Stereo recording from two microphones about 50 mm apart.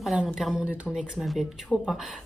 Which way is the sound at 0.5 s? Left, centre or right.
Centre.